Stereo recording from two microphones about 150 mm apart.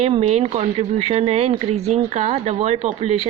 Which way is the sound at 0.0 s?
45° right (ahead or behind).